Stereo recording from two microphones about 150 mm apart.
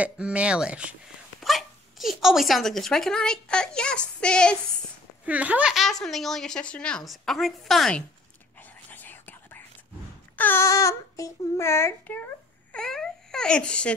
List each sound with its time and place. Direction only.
0.0 s speech: 10° right (ahead or behind)
5.2 s a woman's voice: 10° right (ahead or behind)
8.5 s whispering: 10° left (ahead or behind)
10.3 s child singing: 15° left (ahead or behind)
12.7 s speech: 5° left (ahead or behind)